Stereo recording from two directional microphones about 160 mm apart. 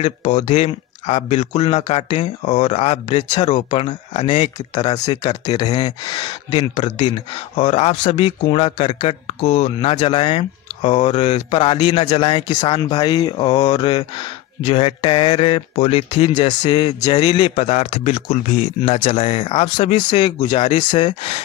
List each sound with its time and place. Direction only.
0.0 s speech: 45° left (ahead or behind)
1.7 s speech: 35° left (ahead or behind)
2.1 s speech: 45° left (ahead or behind)
4.7 s speech: 25° left (ahead or behind)
7.5 s speech: 40° left (ahead or behind)
10.9 s speech: 45° left (ahead or behind); by 17.5 s 25° left (ahead or behind)
17.6 s speech: 40° left (ahead or behind)